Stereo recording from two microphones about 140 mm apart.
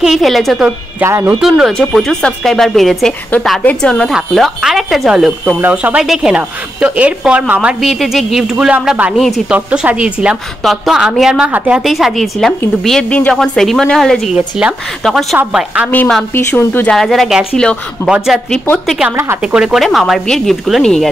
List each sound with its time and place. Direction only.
0.0 s a woman's voice: centre (ahead or behind); by 1.3 s 15° right (ahead or behind)
1.4 s a woman's voice: centre (ahead or behind)
4.1 s a woman's voice: centre (ahead or behind)
15.9 s speech: 5° left (ahead or behind)
16.9 s a woman's voice: centre (ahead or behind)
19.0 s a woman's voice: 20° right (ahead or behind)
19.4 s a woman's voice: 5° right (ahead or behind)